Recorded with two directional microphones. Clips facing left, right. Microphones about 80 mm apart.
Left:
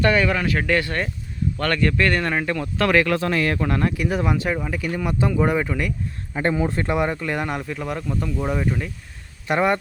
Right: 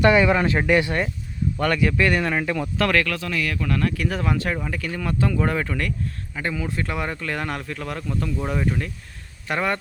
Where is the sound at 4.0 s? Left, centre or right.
Centre.